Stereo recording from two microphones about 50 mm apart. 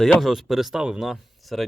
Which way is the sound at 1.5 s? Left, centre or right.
Centre.